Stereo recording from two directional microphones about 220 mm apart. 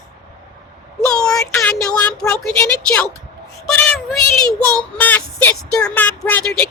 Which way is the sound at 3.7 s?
5° left (ahead or behind).